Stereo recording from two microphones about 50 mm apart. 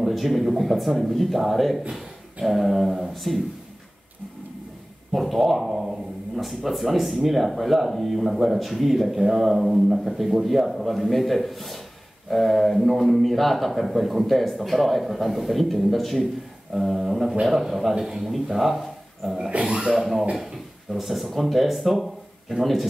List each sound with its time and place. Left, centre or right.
0.0 s a man's voice: centre
5.1 s a man's voice: centre
19.7 s speech: centre
20.0 s a man's voice: centre